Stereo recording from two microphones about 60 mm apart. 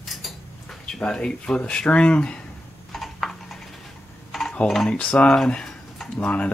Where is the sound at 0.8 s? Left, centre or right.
Centre.